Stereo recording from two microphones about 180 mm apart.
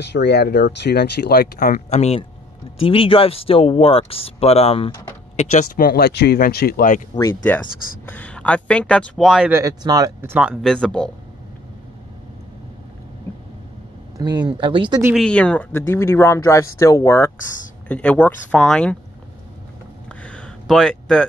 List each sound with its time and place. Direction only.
0.0 s speech: 70° left (ahead or behind); by 7.0 s 55° left (ahead or behind)
8.1 s speech: 10° left (ahead or behind)
9.5 s speech: 20° right (ahead or behind)
10.5 s speech: 5° left (ahead or behind)
14.1 s speech: 20° right (ahead or behind)
15.1 s speech: 5° left (ahead or behind)
20.1 s a sound: 5° left (ahead or behind)